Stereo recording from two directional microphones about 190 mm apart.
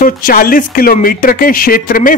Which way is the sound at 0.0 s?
50° left (ahead or behind).